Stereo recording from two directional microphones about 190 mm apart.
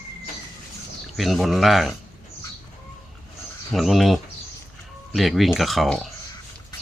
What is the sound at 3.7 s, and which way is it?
Speech, centre (ahead or behind).